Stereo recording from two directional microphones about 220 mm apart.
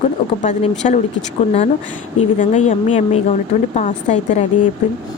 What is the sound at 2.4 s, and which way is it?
Speech, 30° left (ahead or behind).